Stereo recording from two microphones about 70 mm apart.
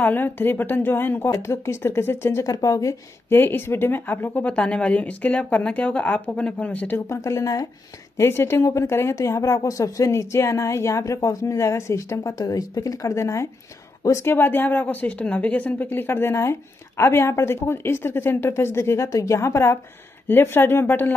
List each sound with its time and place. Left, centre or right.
0.0 s speech: left
2.4 s a woman's voice: left
3.3 s speech: left
4.5 s a woman's voice: centre
7.1 s a woman's voice: left
8.3 s a woman's voice: left